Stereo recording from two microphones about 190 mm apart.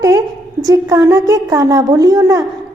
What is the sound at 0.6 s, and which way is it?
A woman's voice, 20° right (ahead or behind).